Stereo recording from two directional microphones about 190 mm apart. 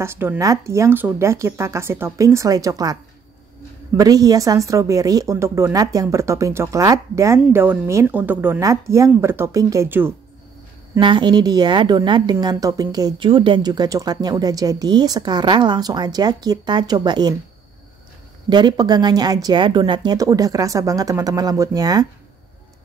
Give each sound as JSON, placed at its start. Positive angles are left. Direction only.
{"t": 0.0, "sound": "speech", "side_deg": -10}
{"t": 11.0, "sound": "a woman's voice", "side_deg": -25}
{"t": 18.5, "sound": "a woman's voice", "side_deg": -25}